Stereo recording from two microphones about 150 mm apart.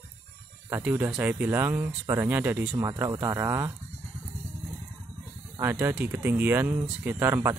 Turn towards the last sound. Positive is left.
turn(degrees=-15)  # may be behind; listen again after turning